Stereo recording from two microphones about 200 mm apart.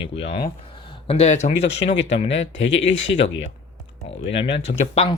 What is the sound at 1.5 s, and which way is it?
Speech, 60° left (ahead or behind).